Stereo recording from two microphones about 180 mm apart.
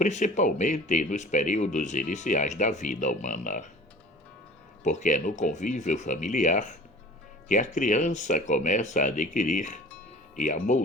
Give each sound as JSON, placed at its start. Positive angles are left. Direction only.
{"t": 0.0, "sound": "speech", "side_deg": 40}
{"t": 4.8, "sound": "speech", "side_deg": 40}